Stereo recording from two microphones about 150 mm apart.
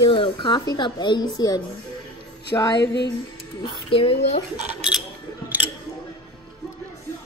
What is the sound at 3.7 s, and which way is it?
Speech, 35° left (ahead or behind).